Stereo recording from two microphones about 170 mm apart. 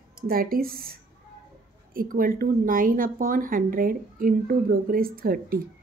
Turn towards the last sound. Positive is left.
turn(degrees=-60)  # may be behind; listen again after turning